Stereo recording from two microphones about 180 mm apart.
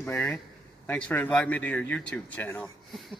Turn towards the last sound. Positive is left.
turn(degrees=5)  # may be behind; listen again after turning